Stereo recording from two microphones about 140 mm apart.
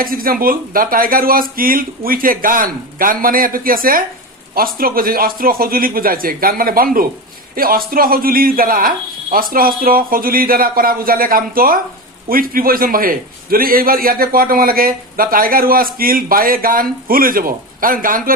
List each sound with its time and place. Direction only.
0.0 s a man's voice: 90° right